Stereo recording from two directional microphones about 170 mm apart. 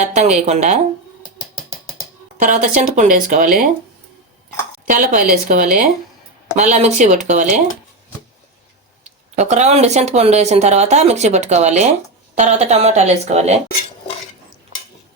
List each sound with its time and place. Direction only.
0.0 s a woman's voice: 45° right (ahead or behind)
2.4 s a woman's voice: 50° right (ahead or behind)
4.9 s a woman's voice: 50° right (ahead or behind)
9.0 s speech: 40° right (ahead or behind)